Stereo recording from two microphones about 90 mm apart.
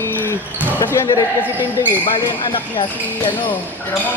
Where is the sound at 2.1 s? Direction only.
70° left (ahead or behind).